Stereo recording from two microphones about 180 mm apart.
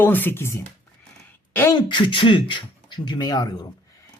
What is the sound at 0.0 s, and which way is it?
Speech, 10° left (ahead or behind).